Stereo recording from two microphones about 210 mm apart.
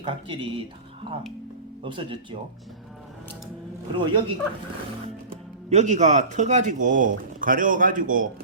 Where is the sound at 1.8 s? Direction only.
25° right (ahead or behind).